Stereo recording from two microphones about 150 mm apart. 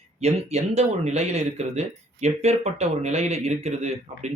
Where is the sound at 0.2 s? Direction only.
45° right (ahead or behind).